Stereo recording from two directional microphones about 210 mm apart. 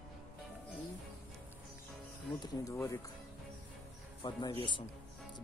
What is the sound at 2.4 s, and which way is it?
Speech, 15° left (ahead or behind).